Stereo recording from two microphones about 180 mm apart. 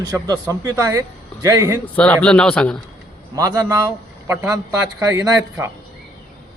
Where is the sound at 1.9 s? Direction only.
5° left (ahead or behind).